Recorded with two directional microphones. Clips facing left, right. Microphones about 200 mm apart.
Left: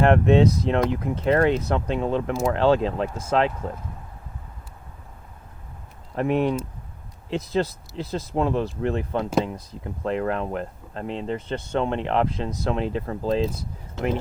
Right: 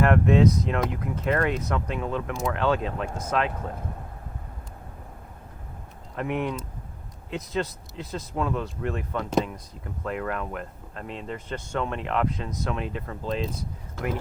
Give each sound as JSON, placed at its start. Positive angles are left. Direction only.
{"t": 0.0, "sound": "speech", "side_deg": 25}
{"t": 6.1, "sound": "speech", "side_deg": 30}